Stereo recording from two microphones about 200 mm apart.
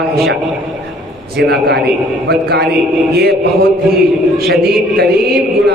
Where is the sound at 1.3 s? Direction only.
55° right (ahead or behind).